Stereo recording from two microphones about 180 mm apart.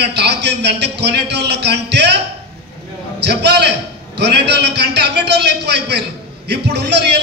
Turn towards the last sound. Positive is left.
turn(degrees=-70)  # may be behind; listen again after turning